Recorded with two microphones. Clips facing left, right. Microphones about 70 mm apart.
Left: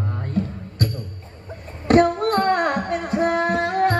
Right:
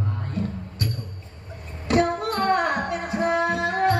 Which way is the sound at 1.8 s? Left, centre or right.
Left.